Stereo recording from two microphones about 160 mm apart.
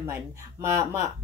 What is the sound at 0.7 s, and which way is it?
Speech, 20° right (ahead or behind).